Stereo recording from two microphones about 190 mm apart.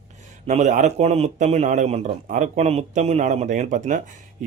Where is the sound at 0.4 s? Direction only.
40° right (ahead or behind).